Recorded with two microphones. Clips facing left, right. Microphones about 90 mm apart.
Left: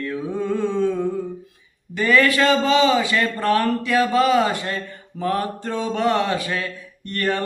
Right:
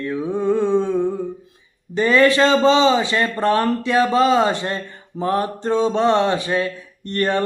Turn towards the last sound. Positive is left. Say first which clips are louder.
# right 3 dB
turn(degrees=-30)  # may be behind; listen again after turning